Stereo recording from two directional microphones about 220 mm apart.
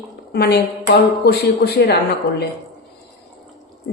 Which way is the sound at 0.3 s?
45° left (ahead or behind).